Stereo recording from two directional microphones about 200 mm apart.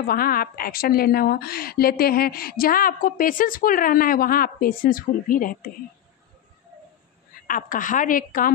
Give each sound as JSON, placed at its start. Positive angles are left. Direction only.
{"t": 0.0, "sound": "a woman's voice", "side_deg": 45}
{"t": 7.4, "sound": "a woman's voice", "side_deg": 45}